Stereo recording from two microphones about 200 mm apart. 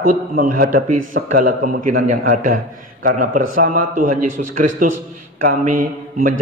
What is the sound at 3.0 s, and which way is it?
A man's voice, 45° right (ahead or behind).